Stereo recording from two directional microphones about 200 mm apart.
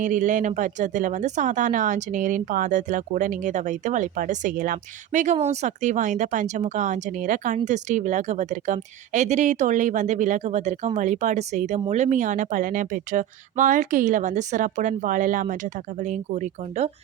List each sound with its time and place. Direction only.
0.0 s speech: 40° right (ahead or behind)